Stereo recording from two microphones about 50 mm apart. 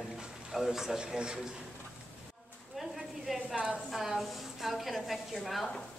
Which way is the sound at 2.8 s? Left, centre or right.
Centre.